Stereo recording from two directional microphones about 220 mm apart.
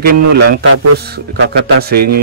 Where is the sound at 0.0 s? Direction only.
45° right (ahead or behind).